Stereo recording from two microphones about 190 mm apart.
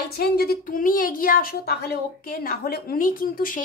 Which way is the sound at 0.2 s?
55° left (ahead or behind).